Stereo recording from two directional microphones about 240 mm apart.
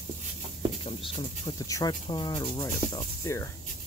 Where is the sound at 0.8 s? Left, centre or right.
Left.